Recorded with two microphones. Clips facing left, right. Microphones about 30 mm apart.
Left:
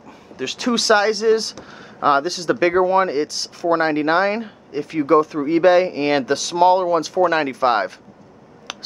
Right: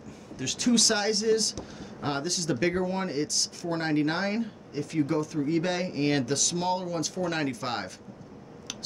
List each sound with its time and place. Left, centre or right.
0.4 s speech: left